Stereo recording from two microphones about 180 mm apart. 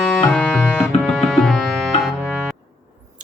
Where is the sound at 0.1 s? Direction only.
5° left (ahead or behind).